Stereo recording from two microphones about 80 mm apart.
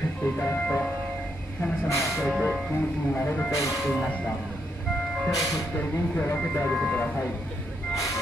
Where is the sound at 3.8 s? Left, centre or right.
Centre.